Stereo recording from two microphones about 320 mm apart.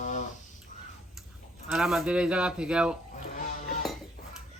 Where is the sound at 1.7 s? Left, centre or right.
Centre.